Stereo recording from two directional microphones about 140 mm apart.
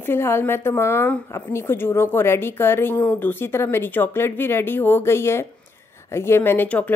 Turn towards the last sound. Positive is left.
turn(degrees=10)  # may be behind; listen again after turning